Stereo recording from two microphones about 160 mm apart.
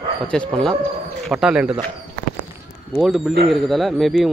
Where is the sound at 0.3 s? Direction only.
5° left (ahead or behind).